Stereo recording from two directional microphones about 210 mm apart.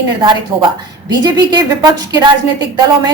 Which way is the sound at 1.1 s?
20° right (ahead or behind).